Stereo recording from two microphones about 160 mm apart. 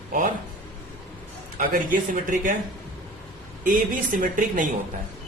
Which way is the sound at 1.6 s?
60° right (ahead or behind).